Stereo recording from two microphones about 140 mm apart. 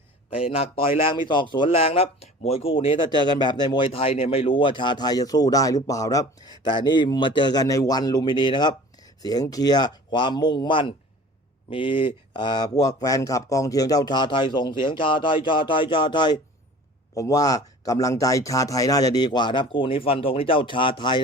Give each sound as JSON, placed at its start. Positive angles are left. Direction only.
{"t": 0.3, "sound": "a man's voice", "side_deg": 40}